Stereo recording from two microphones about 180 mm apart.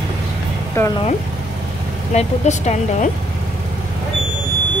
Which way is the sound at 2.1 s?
40° left (ahead or behind).